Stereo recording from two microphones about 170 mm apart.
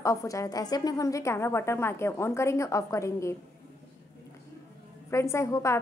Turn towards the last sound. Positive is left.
turn(degrees=15)  # may be behind; listen again after turning